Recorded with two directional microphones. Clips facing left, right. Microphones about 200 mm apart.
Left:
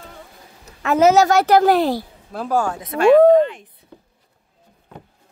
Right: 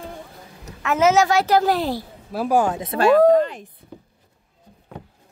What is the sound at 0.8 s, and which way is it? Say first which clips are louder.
Speech: left 3 dB; 35° left (ahead or behind).